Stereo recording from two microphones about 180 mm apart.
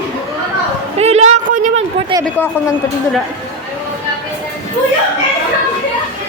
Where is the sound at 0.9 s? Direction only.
35° right (ahead or behind).